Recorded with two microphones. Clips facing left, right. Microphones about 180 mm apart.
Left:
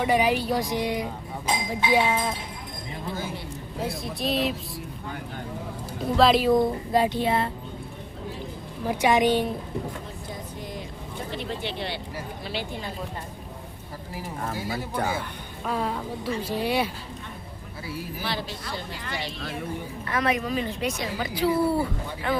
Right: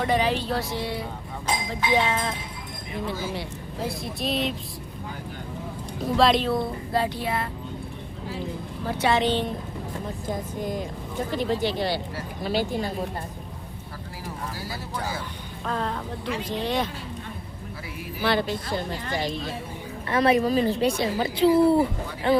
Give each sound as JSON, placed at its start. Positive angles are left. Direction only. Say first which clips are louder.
{"t": 0.0, "sound": "speech", "louder": "left 1 dB", "side_deg": 10}
{"t": 3.8, "sound": "speech", "louder": "even", "side_deg": 0}
{"t": 6.1, "sound": "speech", "louder": "left 1 dB", "side_deg": 0}
{"t": 6.5, "sound": "speech", "louder": "left 4 dB", "side_deg": 15}
{"t": 8.9, "sound": "speech", "louder": "left 2 dB", "side_deg": 15}
{"t": 10.2, "sound": "speech", "louder": "right 10 dB", "side_deg": -50}
{"t": 14.7, "sound": "speech", "louder": "left 5 dB", "side_deg": 60}
{"t": 15.6, "sound": "speech", "louder": "left 1 dB", "side_deg": 10}
{"t": 18.2, "sound": "speech", "louder": "right 12 dB", "side_deg": -55}
{"t": 20.1, "sound": "a woman's voice", "louder": "right 6 dB", "side_deg": -30}